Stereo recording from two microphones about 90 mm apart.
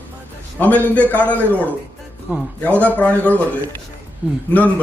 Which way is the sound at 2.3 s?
15° right (ahead or behind).